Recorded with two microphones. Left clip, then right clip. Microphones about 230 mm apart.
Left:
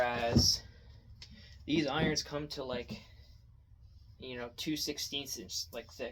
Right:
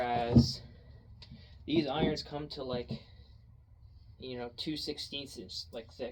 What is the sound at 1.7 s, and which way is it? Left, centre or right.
Speech, left.